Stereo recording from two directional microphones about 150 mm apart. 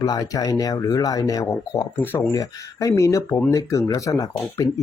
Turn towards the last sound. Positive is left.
turn(degrees=20)  # may be behind; listen again after turning